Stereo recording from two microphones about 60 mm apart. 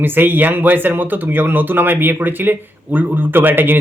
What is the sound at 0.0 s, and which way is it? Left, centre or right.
Speech, right.